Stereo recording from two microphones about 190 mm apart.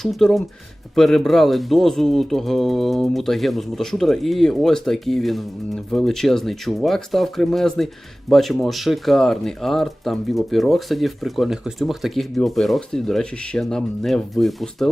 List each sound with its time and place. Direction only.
0.0 s speech: centre (ahead or behind)